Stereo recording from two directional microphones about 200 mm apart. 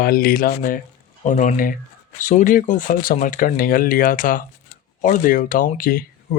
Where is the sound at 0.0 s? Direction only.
45° left (ahead or behind).